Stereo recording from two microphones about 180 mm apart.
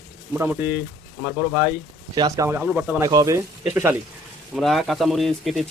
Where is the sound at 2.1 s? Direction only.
20° right (ahead or behind).